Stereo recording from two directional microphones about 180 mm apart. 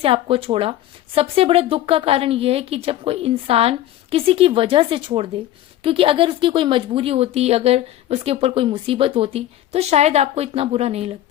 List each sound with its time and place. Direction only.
0.0 s speech: 30° right (ahead or behind)